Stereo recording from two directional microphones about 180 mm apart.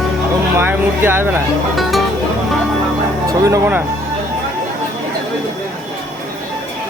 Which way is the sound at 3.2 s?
20° right (ahead or behind).